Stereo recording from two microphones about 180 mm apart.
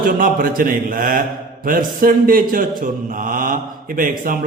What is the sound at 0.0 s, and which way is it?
Mantra, 50° right (ahead or behind).